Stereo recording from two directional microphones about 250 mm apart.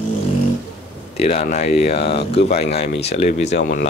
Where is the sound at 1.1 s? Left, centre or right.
Left.